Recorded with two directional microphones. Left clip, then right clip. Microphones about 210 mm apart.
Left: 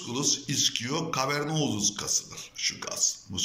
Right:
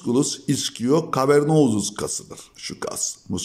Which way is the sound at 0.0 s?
65° right (ahead or behind).